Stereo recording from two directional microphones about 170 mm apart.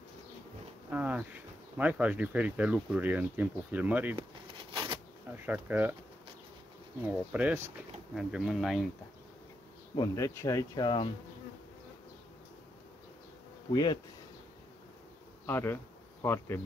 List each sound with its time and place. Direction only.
0.8 s speech: 10° right (ahead or behind)
4.6 s insect: 30° right (ahead or behind)
5.3 s speech: 10° right (ahead or behind)
7.1 s speech: 10° right (ahead or behind)
9.9 s speech: 20° left (ahead or behind)
15.4 s insect: 15° left (ahead or behind)